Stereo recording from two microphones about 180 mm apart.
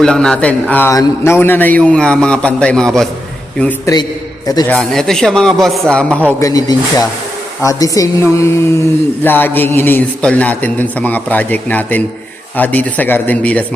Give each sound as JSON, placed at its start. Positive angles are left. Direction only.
{"t": 0.0, "sound": "a man's voice", "side_deg": 5}
{"t": 6.4, "sound": "a man's voice", "side_deg": 20}